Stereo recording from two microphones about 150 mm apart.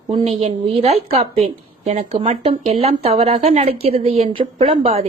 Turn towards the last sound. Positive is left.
turn(degrees=-40)  # may be behind; listen again after turning